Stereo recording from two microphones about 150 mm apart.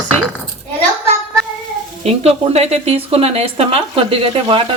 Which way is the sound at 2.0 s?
45° right (ahead or behind).